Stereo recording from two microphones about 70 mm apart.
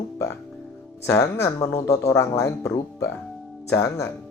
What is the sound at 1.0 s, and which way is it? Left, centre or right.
Speech, left.